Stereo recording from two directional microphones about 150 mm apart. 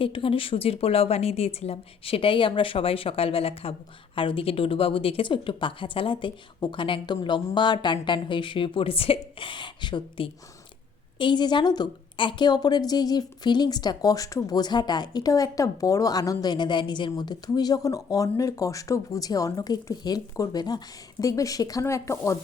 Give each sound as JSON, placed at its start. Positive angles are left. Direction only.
{"t": 0.0, "sound": "a woman's voice", "side_deg": 35}